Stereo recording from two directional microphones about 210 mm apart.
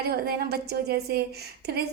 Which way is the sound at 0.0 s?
50° right (ahead or behind).